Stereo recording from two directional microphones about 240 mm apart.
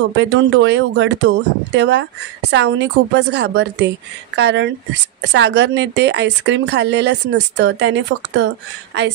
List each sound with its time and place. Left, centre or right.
0.0 s speech: right